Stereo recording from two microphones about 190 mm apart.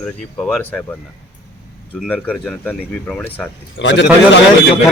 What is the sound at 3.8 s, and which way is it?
Speech, 75° left (ahead or behind).